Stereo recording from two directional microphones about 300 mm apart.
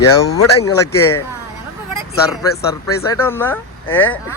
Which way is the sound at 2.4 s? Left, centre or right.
Centre.